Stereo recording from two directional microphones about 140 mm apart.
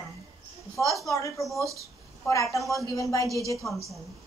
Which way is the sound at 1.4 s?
Centre (ahead or behind).